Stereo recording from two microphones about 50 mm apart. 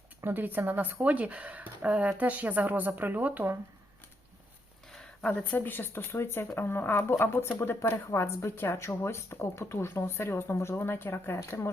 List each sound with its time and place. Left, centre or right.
0.2 s speech: right
5.4 s speech: left
6.1 s speech: left
6.7 s speech: left
8.1 s a woman's voice: left
8.5 s speech: left
9.9 s speech: left